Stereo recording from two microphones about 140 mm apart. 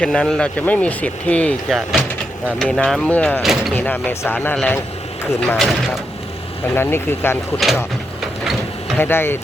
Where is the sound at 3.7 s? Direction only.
15° left (ahead or behind).